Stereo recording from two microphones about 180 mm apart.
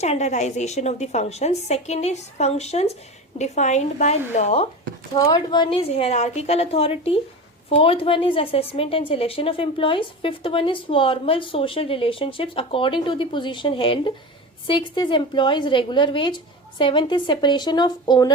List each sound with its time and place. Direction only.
0.0 s a woman's voice: 40° left (ahead or behind)
5.1 s a woman's voice: 20° left (ahead or behind)